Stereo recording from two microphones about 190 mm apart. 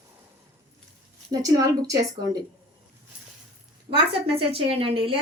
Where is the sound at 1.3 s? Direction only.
20° right (ahead or behind).